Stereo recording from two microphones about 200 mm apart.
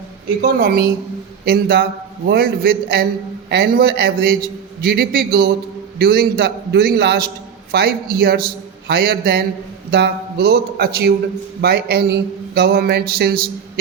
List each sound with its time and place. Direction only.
0.4 s a man's voice: 50° right (ahead or behind)